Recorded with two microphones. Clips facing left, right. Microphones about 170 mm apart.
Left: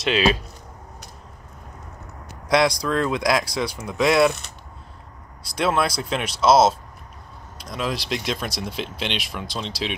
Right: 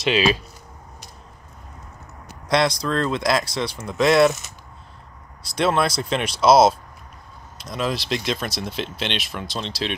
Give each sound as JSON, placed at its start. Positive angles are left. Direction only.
{"t": 0.0, "sound": "speech", "side_deg": 0}
{"t": 2.4, "sound": "speech", "side_deg": 10}
{"t": 5.6, "sound": "speech", "side_deg": 5}
{"t": 7.7, "sound": "speech", "side_deg": 0}